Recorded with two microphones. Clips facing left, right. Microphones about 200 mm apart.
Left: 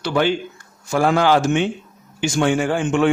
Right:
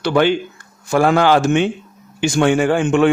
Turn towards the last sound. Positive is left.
turn(degrees=-60)  # may be behind; listen again after turning